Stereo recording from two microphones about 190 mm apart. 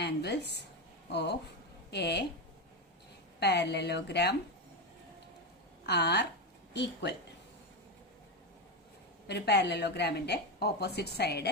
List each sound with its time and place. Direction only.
0.0 s a woman's voice: 60° left (ahead or behind)
3.4 s a woman's voice: 60° left (ahead or behind)
5.8 s a woman's voice: 60° left (ahead or behind)
9.2 s a woman's voice: 60° left (ahead or behind)